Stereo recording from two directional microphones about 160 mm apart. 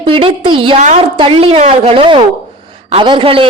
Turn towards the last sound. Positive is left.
turn(degrees=-35)  # may be behind; listen again after turning